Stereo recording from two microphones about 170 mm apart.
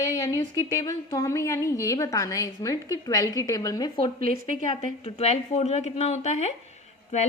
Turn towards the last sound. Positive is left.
turn(degrees=45)  # may be behind; listen again after turning